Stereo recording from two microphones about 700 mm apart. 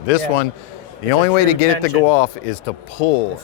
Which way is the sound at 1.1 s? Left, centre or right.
Left.